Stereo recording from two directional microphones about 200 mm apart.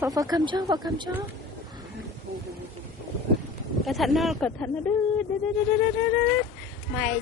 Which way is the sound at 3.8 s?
Centre (ahead or behind).